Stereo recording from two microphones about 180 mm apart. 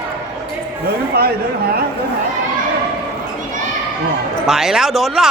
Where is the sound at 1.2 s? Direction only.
60° right (ahead or behind).